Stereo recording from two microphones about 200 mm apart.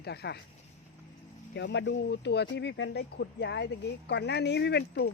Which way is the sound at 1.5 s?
60° left (ahead or behind).